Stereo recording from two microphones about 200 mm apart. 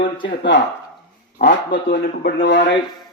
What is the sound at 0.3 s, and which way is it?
A man's voice, 60° left (ahead or behind).